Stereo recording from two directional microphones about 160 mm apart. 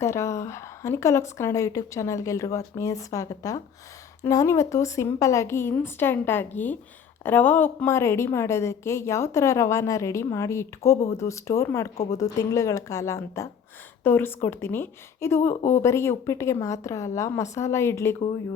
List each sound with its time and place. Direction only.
0.0 s a woman's voice: 15° left (ahead or behind)